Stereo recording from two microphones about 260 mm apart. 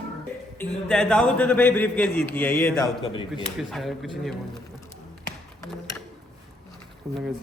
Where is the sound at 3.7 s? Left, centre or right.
Centre.